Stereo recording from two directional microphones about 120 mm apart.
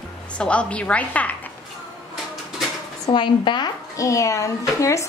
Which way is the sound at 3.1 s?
40° left (ahead or behind).